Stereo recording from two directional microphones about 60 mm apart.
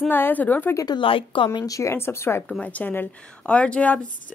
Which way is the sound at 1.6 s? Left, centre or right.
Left.